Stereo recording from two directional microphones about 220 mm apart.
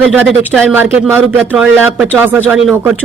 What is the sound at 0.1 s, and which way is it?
A woman's voice, 5° right (ahead or behind).